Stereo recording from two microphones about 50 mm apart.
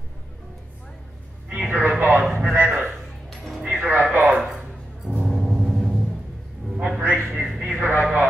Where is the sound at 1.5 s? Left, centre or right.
Right.